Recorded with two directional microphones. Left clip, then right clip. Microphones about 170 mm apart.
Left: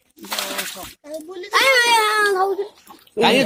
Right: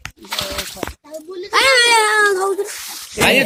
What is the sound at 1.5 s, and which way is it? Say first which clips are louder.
Speech: right 3 dB; 30° right (ahead or behind).